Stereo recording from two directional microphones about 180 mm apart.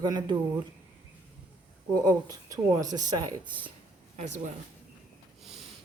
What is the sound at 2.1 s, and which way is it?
A woman's voice, 20° right (ahead or behind).